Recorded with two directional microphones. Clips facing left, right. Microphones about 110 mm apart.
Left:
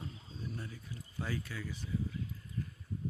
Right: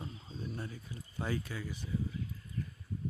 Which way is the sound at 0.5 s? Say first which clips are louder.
Right 3 dB; 35° right (ahead or behind).